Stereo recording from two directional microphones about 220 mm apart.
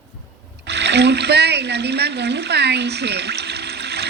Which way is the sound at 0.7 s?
50° right (ahead or behind).